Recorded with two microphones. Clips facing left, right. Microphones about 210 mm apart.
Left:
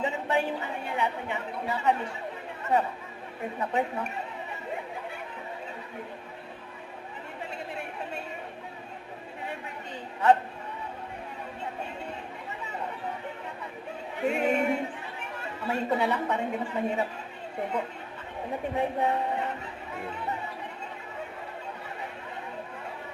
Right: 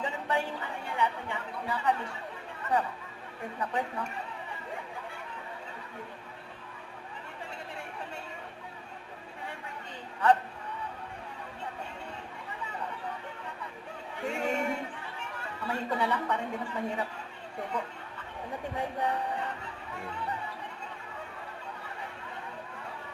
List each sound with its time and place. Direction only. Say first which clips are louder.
0.0 s a woman's voice: left 4 dB; 25° left (ahead or behind)
3.6 s a woman's voice: left 4 dB; 25° left (ahead or behind)
7.5 s chatter: left 5 dB; 20° left (ahead or behind)
14.2 s a sound: left 6 dB; 20° left (ahead or behind)
15.4 s a woman's voice: left 5 dB; 25° left (ahead or behind)